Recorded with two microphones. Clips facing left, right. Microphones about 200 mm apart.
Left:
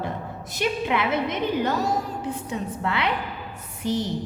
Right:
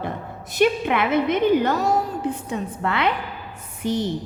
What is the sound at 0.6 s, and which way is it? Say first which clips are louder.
Speech: right 8 dB; 55° right (ahead or behind).